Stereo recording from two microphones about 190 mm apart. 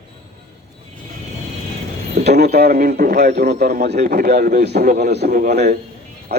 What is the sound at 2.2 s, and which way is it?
A man's voice, 60° right (ahead or behind).